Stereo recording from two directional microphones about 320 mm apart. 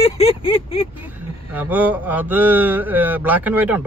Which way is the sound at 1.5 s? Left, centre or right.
Centre.